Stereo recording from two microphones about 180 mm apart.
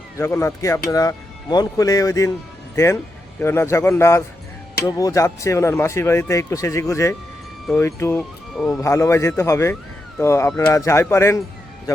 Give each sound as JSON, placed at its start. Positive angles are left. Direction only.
{"t": 0.2, "sound": "speech", "side_deg": 15}
{"t": 8.5, "sound": "speech", "side_deg": 0}
{"t": 8.8, "sound": "speech", "side_deg": 15}